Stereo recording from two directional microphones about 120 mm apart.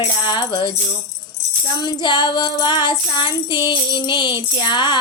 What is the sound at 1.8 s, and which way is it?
Child singing, 40° left (ahead or behind).